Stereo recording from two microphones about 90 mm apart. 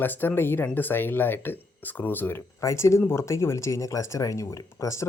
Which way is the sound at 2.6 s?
30° left (ahead or behind).